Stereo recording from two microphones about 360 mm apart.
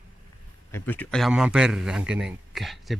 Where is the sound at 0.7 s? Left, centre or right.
Centre.